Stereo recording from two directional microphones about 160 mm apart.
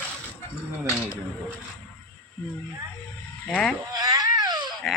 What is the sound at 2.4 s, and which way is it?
Speech, 10° left (ahead or behind).